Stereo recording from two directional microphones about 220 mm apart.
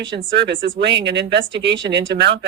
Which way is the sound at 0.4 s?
50° right (ahead or behind).